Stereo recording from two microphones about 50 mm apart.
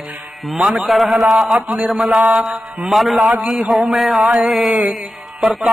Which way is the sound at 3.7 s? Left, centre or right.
Centre.